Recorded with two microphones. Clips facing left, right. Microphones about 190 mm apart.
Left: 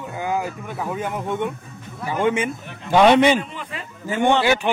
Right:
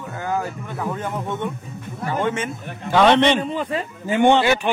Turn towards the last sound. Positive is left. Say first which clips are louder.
# even
turn(degrees=15)  # may be behind; listen again after turning